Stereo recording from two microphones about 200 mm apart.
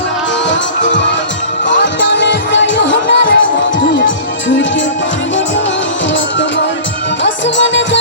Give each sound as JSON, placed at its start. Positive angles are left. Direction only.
{"t": 1.6, "sound": "music", "side_deg": 65}
{"t": 7.4, "sound": "music", "side_deg": 65}